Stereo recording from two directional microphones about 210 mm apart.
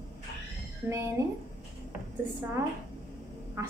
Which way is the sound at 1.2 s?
15° right (ahead or behind).